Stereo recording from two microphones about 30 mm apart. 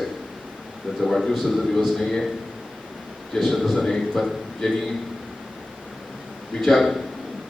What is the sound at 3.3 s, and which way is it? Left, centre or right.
A man's voice, centre.